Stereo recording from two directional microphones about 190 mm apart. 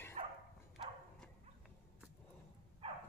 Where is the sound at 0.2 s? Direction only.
30° right (ahead or behind).